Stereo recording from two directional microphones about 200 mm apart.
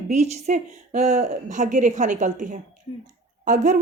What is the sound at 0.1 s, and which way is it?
A woman's voice, 35° right (ahead or behind).